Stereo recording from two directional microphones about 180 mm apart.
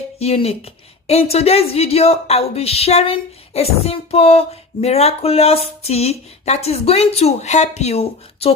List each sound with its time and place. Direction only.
0.2 s a woman's voice: 35° left (ahead or behind)